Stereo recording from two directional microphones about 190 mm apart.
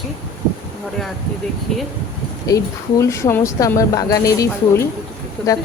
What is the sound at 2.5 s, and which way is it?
Speech, 20° left (ahead or behind).